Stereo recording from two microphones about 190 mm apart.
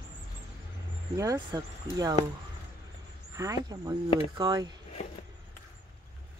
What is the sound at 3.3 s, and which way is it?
Speech, 20° right (ahead or behind).